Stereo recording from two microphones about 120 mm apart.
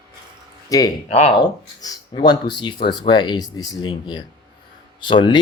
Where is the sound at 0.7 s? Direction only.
30° left (ahead or behind).